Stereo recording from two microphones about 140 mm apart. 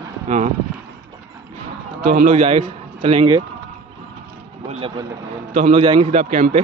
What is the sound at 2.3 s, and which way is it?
A man's voice, 50° right (ahead or behind).